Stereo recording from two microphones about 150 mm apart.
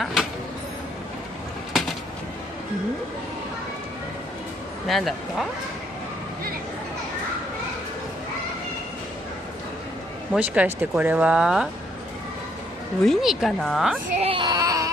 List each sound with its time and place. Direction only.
0.0 s a sound: centre (ahead or behind)
4.8 s a woman's voice: centre (ahead or behind)
10.3 s speech: 10° right (ahead or behind)
13.0 s a woman's voice: centre (ahead or behind)
14.1 s speech: 40° right (ahead or behind)
14.4 s baby cry: 25° right (ahead or behind)